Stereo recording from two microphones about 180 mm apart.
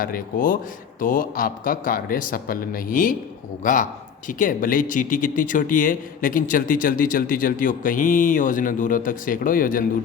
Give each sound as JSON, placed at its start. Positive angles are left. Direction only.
{"t": 0.0, "sound": "speech", "side_deg": 50}